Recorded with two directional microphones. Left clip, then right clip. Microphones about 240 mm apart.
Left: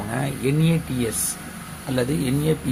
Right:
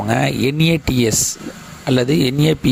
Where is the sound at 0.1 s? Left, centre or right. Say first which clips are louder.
Right 8 dB; right.